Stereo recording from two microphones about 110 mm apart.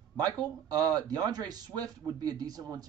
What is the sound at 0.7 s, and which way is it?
A man's voice, 35° right (ahead or behind).